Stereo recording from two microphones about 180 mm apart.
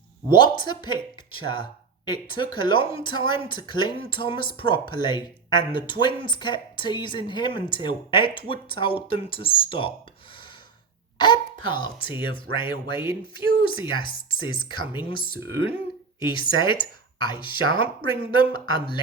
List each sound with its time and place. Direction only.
0.3 s speech: 25° left (ahead or behind)
11.2 s a woman's voice: 25° left (ahead or behind)